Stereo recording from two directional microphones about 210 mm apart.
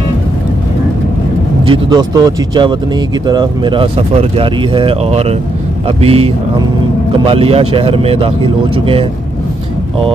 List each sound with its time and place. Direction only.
1.7 s speech: 20° right (ahead or behind)
7.2 s speech: 30° right (ahead or behind)